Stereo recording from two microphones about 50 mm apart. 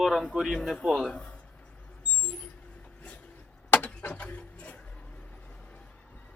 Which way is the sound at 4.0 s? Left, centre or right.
Left.